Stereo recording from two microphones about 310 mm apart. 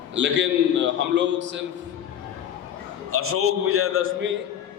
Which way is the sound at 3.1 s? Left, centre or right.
Right.